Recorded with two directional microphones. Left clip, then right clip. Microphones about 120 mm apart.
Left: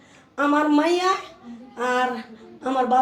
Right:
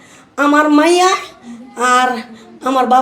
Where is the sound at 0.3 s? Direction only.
45° right (ahead or behind).